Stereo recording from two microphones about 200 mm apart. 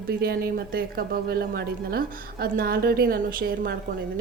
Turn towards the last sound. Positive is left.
turn(degrees=-50)  # may be behind; listen again after turning